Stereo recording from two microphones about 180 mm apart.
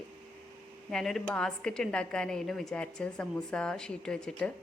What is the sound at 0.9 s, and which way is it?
A woman's voice, centre (ahead or behind).